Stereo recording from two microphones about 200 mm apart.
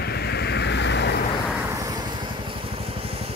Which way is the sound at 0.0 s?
55° left (ahead or behind).